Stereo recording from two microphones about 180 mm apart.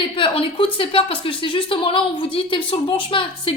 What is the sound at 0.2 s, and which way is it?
A child's voice, 30° left (ahead or behind).